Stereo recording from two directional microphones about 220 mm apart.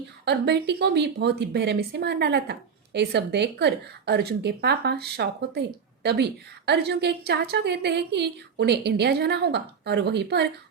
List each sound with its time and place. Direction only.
0.3 s a woman's voice: 50° right (ahead or behind)